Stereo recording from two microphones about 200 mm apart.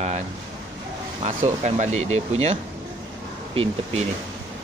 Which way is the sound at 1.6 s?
35° right (ahead or behind).